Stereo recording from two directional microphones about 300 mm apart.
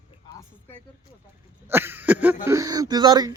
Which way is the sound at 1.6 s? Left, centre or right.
Centre.